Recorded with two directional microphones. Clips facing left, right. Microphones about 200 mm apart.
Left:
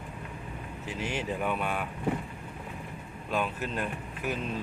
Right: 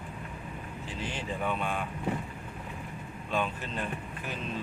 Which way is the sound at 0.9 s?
10° left (ahead or behind).